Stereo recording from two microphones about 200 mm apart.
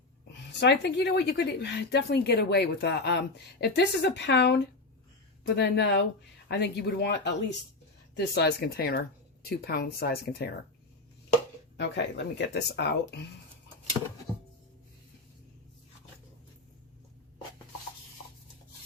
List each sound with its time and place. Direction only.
0.3 s a woman's voice: 60° left (ahead or behind)
11.8 s a woman's voice: 60° left (ahead or behind)